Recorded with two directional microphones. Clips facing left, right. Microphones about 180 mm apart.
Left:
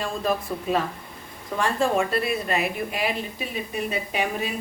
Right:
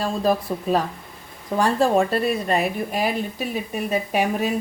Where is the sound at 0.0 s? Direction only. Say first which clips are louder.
Right 4 dB; 35° right (ahead or behind).